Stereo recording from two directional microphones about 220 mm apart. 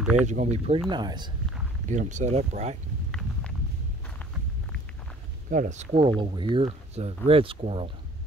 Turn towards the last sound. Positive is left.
turn(degrees=-25)  # may be behind; listen again after turning